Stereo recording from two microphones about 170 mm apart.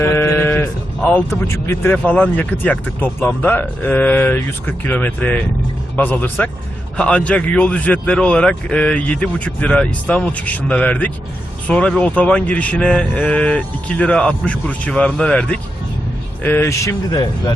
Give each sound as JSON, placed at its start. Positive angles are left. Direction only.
{"t": 0.0, "sound": "speech", "side_deg": 10}